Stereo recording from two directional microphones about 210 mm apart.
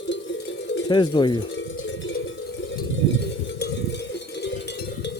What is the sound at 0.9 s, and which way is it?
Speech, 20° left (ahead or behind).